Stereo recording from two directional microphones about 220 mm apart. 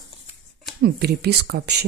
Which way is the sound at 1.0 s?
45° right (ahead or behind).